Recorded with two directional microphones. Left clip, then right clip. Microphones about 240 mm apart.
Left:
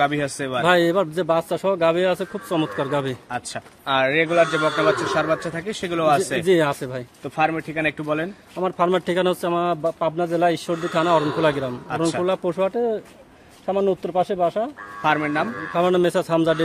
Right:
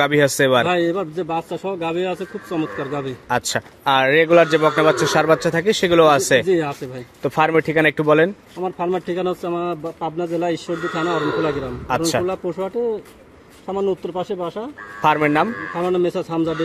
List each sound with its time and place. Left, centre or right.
0.0 s speech: right
0.7 s a man's voice: left
3.3 s speech: right
6.4 s a man's voice: left
7.2 s speech: right
8.6 s a man's voice: left
13.7 s a man's voice: left
15.0 s speech: right
15.8 s a man's voice: left